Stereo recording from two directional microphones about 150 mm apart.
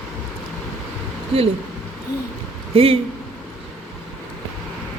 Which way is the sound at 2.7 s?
40° right (ahead or behind).